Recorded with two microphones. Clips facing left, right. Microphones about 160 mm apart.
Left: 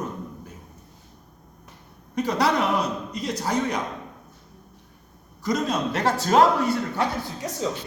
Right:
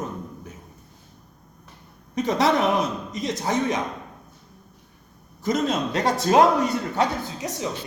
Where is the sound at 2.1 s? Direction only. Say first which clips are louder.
Right 2 dB; 20° right (ahead or behind).